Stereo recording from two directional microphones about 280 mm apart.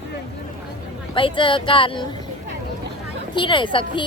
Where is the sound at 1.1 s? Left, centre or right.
Centre.